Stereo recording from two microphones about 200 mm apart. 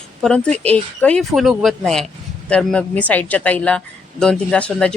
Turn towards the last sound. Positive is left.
turn(degrees=5)  # may be behind; listen again after turning